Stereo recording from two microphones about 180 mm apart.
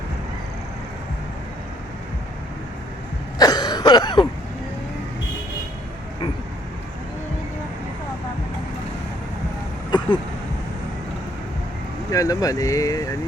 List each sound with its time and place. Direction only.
3.3 s throat clearing: 20° left (ahead or behind)
9.9 s vehicle: 25° left (ahead or behind)
12.1 s speech: 20° left (ahead or behind)